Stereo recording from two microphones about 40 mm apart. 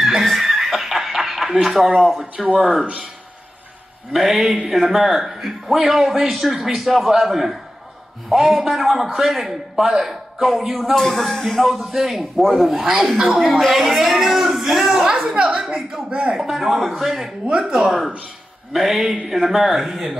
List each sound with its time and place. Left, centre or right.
0.0 s chicken: centre
2.4 s a man's voice: centre
2.8 s speech: right
4.1 s a man's voice: centre
16.1 s speech: right
16.3 s a man's voice: centre
17.5 s speech: centre